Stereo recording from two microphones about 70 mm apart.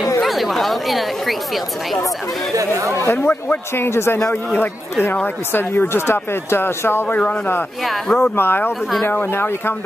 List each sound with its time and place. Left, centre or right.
0.2 s speech: centre
2.5 s speech: right
3.1 s a man's voice: left
7.8 s speech: centre
8.2 s speech: left